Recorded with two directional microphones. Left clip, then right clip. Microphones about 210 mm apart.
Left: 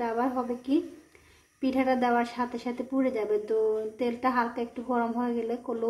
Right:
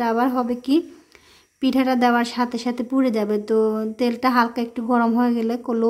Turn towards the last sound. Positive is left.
turn(degrees=-50)  # may be behind; listen again after turning